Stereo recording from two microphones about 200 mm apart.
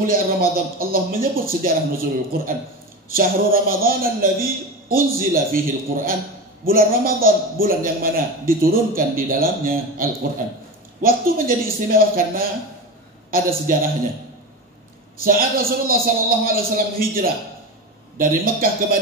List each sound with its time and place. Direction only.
0.0 s a man's voice: 45° right (ahead or behind)
15.2 s a man's voice: 45° right (ahead or behind)